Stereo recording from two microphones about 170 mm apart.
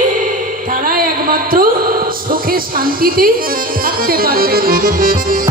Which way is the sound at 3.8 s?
60° right (ahead or behind).